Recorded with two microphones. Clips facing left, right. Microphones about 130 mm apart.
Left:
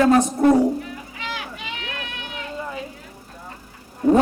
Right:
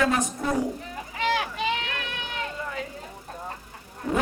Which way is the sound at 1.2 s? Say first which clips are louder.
Right 8 dB; 45° right (ahead or behind).